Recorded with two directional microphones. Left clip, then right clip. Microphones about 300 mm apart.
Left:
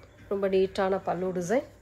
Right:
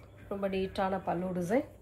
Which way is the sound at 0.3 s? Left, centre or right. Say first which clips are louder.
Left 8 dB; left.